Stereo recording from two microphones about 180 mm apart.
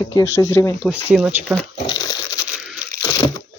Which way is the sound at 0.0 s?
15° left (ahead or behind).